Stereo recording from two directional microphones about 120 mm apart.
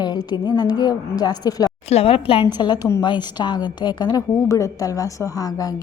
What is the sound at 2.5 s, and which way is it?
A woman's voice, 35° left (ahead or behind).